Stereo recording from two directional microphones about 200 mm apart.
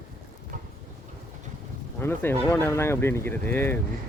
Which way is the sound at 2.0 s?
10° left (ahead or behind).